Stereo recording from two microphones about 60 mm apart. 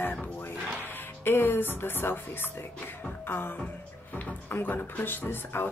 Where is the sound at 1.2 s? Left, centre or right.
Left.